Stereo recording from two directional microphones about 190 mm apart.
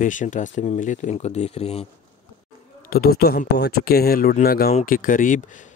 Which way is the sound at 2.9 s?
55° left (ahead or behind).